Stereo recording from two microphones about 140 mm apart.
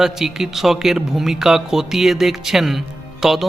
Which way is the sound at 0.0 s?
5° right (ahead or behind).